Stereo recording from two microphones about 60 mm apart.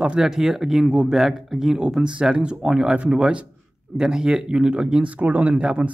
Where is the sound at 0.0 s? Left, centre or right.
Centre.